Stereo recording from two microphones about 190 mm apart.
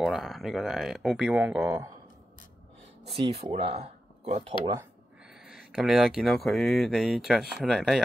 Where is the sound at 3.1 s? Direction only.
30° right (ahead or behind).